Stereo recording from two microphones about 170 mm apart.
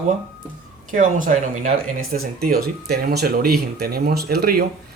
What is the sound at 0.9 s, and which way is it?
Speech, 50° right (ahead or behind).